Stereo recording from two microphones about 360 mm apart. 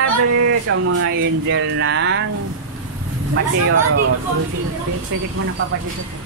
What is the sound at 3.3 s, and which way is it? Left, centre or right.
Speech, right.